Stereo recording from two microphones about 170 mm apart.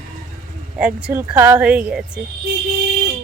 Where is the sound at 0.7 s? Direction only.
5° right (ahead or behind).